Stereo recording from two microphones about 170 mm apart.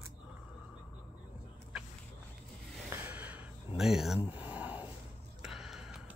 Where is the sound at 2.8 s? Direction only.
15° right (ahead or behind).